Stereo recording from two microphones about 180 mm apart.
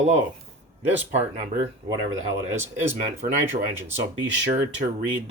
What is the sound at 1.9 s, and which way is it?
Speech, 15° right (ahead or behind).